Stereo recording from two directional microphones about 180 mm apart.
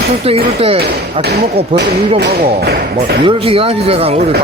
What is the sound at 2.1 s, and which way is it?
Speech, 60° right (ahead or behind).